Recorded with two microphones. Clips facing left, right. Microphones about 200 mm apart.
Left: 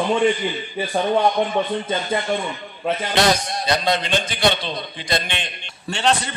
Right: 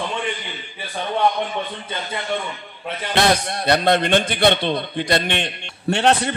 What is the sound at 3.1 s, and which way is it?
A man's voice, 60° right (ahead or behind).